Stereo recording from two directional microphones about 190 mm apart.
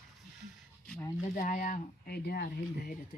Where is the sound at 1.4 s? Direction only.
45° left (ahead or behind).